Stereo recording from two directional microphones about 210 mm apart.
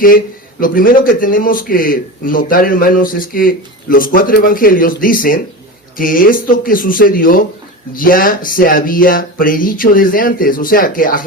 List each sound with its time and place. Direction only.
0.6 s a man's voice: 40° left (ahead or behind)